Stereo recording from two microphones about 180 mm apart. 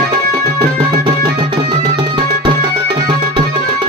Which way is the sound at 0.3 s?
30° right (ahead or behind).